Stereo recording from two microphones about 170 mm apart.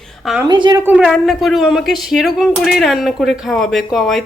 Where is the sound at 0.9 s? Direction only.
5° right (ahead or behind).